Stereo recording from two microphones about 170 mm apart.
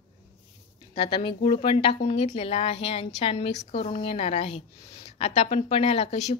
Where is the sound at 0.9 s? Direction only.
30° left (ahead or behind).